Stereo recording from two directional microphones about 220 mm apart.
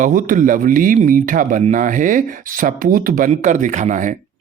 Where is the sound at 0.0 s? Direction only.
35° right (ahead or behind).